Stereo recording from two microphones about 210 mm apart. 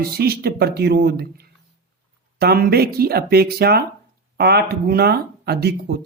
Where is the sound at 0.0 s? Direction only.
50° right (ahead or behind).